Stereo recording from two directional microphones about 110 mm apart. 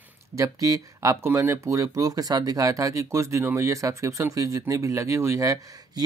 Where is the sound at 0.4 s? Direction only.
30° right (ahead or behind).